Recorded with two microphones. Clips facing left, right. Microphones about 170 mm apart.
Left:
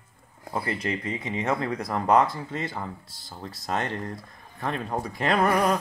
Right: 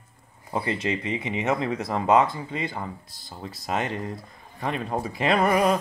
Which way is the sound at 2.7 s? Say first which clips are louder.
Right 1 dB; centre (ahead or behind).